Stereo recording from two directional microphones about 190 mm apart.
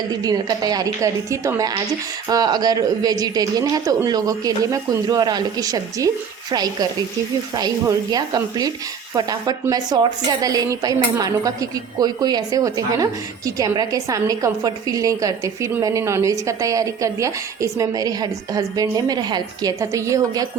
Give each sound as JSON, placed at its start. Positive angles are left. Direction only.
{"t": 0.1, "sound": "a woman's voice", "side_deg": -20}
{"t": 7.5, "sound": "a woman's voice", "side_deg": -20}